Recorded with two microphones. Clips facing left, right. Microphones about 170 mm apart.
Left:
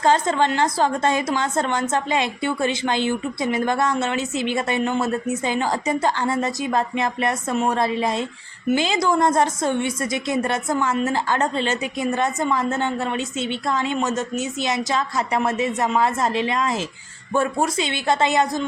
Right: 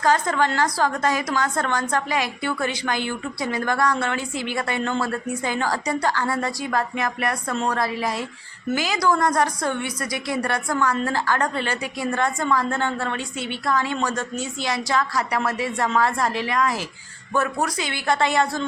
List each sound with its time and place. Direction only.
0.0 s a woman's voice: 25° left (ahead or behind)